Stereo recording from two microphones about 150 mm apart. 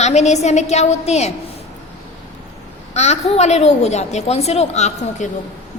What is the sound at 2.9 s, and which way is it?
A woman's voice, 50° left (ahead or behind).